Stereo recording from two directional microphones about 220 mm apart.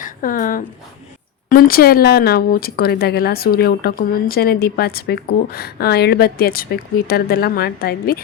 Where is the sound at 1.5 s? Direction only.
40° left (ahead or behind).